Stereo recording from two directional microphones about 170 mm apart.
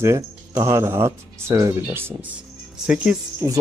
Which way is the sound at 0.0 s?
15° right (ahead or behind).